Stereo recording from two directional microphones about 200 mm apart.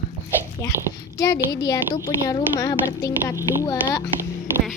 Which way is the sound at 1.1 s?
20° left (ahead or behind).